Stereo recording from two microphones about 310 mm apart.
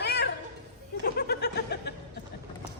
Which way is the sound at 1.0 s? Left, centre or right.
Left.